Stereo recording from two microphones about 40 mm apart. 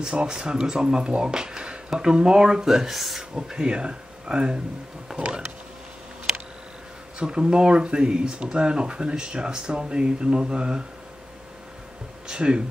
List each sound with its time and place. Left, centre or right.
0.0 s speech: right; by 3.2 s centre
3.2 s speech: centre
7.2 s speech: right
12.3 s speech: right